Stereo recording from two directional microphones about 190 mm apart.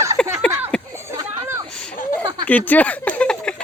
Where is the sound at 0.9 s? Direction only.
15° right (ahead or behind).